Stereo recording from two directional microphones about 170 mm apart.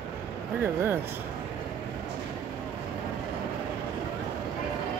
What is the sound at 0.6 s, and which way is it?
Speech, 15° right (ahead or behind).